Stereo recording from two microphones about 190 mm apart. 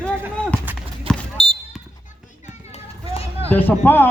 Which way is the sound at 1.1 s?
30° right (ahead or behind).